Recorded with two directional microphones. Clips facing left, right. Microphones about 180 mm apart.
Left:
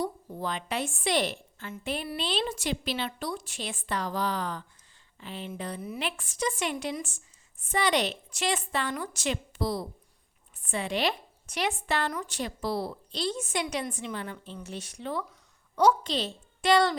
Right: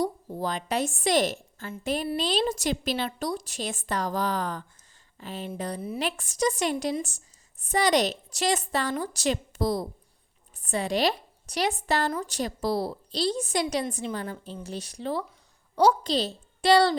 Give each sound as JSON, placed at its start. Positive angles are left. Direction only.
{"t": 0.0, "sound": "a woman's voice", "side_deg": -40}